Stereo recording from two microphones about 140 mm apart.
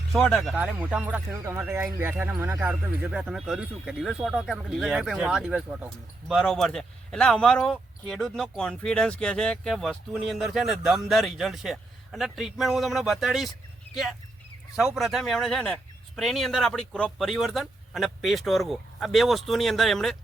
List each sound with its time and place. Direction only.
0.1 s speech: centre (ahead or behind)
0.5 s speech: 10° right (ahead or behind)